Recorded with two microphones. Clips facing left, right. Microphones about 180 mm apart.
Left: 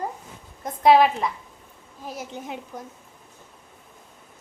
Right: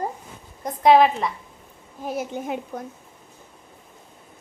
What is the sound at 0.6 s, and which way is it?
Speech, centre (ahead or behind).